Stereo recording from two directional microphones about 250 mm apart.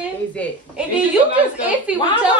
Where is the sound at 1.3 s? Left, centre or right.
Centre.